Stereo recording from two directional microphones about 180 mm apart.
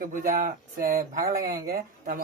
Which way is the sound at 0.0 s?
50° right (ahead or behind).